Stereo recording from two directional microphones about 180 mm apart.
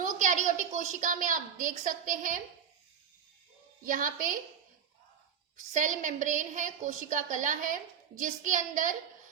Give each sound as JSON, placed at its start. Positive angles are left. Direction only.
{"t": 0.0, "sound": "a woman's voice", "side_deg": -45}
{"t": 3.8, "sound": "a woman's voice", "side_deg": -50}
{"t": 5.5, "sound": "a woman's voice", "side_deg": -45}